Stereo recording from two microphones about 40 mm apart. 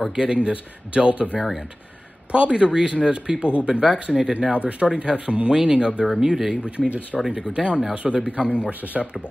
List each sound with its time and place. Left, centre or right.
0.1 s a man's voice: right
3.8 s speech: centre
6.2 s speech: centre
7.1 s speech: centre
7.5 s a man's voice: right